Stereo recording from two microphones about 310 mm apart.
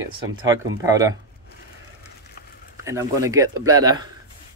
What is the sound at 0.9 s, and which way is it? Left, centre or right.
Speech, centre.